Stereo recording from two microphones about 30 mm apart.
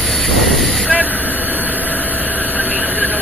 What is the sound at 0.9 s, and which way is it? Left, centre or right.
Vehicle, left.